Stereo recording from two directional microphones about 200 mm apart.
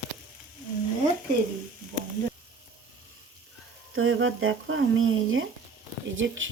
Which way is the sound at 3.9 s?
80° right.